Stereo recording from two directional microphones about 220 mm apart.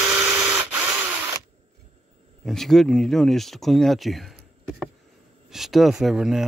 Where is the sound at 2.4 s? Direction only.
Centre (ahead or behind).